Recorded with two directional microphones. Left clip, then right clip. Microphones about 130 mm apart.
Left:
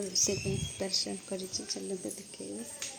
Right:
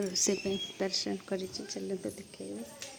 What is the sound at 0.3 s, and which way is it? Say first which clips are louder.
Speech: right 2 dB; 20° right (ahead or behind).